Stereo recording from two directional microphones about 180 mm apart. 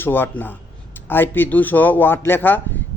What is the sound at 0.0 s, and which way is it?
Speech, 10° left (ahead or behind).